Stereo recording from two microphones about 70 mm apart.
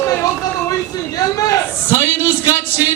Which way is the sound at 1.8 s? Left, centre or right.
Left.